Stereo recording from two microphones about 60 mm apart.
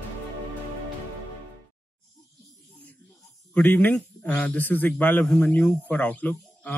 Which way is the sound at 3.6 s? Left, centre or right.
Left.